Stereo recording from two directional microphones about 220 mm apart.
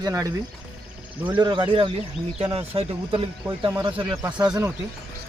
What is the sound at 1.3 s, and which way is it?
Speech, 20° right (ahead or behind).